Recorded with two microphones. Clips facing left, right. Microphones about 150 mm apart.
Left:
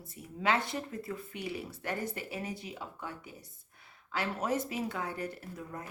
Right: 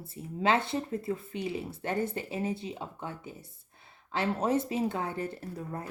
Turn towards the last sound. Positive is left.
turn(degrees=-30)  # may be behind; listen again after turning